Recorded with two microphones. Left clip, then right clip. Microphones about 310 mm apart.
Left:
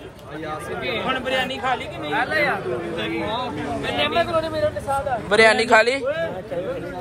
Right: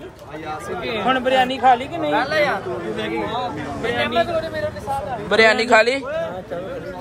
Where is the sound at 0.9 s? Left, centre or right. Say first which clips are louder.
Right 5 dB; right.